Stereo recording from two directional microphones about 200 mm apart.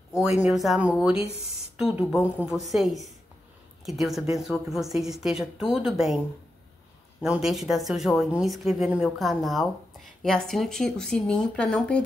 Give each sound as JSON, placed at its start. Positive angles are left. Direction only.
{"t": 0.4, "sound": "a woman's voice", "side_deg": 0}